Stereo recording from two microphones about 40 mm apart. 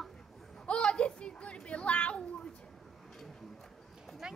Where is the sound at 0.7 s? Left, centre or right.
Left.